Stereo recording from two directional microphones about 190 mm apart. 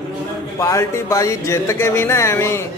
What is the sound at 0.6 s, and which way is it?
Speech, 15° left (ahead or behind).